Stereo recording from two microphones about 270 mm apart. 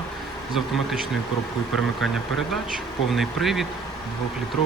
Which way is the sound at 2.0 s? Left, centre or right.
Centre.